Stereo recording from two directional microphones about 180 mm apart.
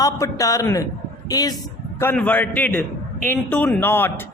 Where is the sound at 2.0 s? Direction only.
10° left (ahead or behind).